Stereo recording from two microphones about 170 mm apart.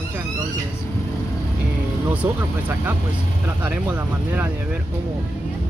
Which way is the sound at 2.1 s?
10° right (ahead or behind).